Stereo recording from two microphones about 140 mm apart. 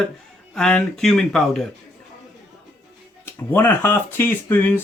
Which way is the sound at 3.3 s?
15° left (ahead or behind).